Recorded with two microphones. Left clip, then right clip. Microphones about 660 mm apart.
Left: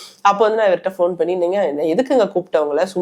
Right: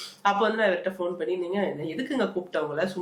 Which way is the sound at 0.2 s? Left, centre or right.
Left.